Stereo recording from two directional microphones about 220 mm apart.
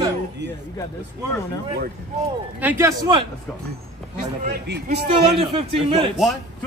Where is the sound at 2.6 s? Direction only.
10° right (ahead or behind).